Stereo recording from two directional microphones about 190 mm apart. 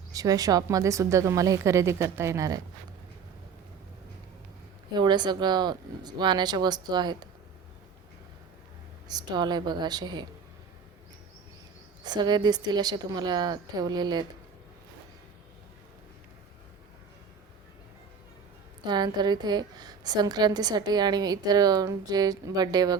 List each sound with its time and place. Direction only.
0.1 s a woman's voice: 20° right (ahead or behind)
4.9 s a woman's voice: 25° right (ahead or behind)
9.0 s a woman's voice: 20° right (ahead or behind)
12.0 s a woman's voice: 20° right (ahead or behind)
18.9 s a woman's voice: 20° right (ahead or behind)